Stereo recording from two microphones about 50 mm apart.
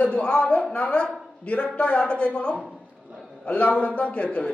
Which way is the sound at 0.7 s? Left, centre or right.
Left.